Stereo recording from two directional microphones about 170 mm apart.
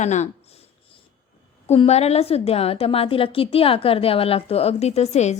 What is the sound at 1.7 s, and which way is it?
A woman's voice, 40° left (ahead or behind).